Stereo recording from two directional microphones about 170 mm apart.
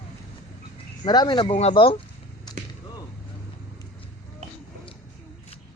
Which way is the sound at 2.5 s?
25° left (ahead or behind).